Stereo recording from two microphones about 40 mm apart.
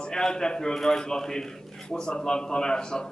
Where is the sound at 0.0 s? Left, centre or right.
Centre.